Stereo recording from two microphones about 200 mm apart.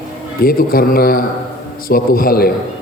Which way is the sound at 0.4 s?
45° left (ahead or behind).